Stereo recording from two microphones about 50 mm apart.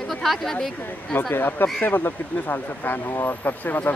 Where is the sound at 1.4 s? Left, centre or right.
Left.